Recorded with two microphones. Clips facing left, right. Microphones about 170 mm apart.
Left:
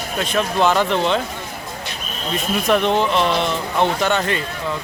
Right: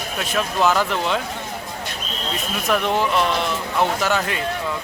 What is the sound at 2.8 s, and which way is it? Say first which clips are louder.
Speech: left 3 dB; 25° left (ahead or behind).